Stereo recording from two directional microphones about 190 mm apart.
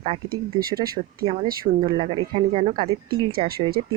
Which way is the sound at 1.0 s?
30° right (ahead or behind).